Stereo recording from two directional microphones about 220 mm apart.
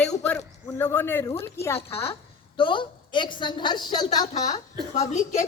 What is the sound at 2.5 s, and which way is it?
A woman's voice, 20° left (ahead or behind).